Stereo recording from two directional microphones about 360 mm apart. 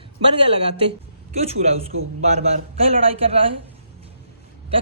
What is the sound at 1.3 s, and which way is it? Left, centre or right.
A man's voice, centre.